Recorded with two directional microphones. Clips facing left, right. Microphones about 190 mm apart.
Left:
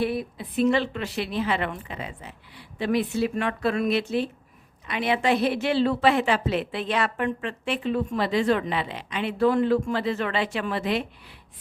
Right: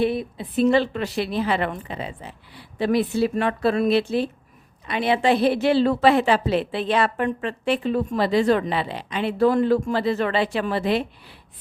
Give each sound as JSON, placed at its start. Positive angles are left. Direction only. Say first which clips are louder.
{"t": 0.0, "sound": "a woman's voice", "louder": "right 4 dB", "side_deg": -25}